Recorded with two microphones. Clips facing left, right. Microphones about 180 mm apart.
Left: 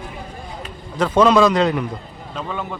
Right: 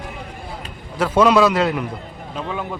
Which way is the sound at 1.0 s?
10° right (ahead or behind).